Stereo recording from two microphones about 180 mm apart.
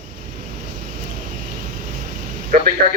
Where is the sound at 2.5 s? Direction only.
50° right (ahead or behind).